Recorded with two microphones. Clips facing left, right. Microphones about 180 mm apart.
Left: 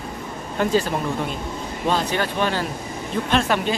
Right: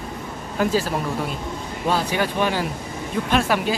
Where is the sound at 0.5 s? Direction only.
5° right (ahead or behind).